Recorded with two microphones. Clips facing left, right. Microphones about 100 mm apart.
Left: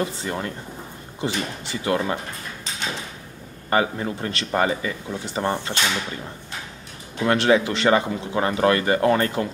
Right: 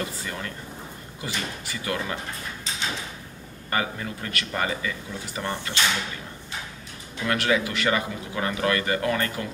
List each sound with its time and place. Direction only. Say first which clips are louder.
0.0 s speech: left 6 dB; 25° left (ahead or behind)
3.7 s speech: left 6 dB; 30° left (ahead or behind)
7.2 s speech: left 6 dB; 30° left (ahead or behind)